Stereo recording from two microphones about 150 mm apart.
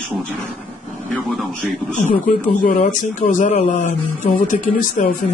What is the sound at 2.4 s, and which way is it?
Speech, 55° left (ahead or behind).